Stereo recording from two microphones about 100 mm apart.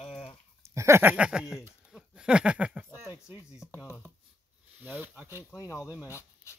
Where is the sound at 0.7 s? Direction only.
25° right (ahead or behind).